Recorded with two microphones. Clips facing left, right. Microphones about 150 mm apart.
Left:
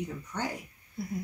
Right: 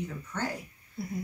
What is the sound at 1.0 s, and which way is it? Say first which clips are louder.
Speech: even; centre (ahead or behind).